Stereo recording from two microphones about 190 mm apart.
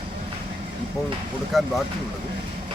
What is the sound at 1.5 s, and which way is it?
Speech, centre (ahead or behind).